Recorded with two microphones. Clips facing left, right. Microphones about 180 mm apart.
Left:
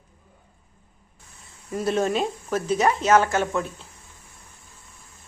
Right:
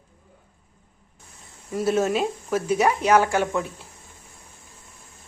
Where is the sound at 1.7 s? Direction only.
5° right (ahead or behind).